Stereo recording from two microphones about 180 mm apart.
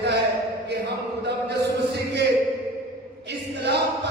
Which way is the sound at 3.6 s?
70° right (ahead or behind).